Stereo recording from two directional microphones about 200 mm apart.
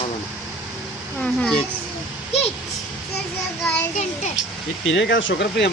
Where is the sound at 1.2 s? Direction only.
5° left (ahead or behind).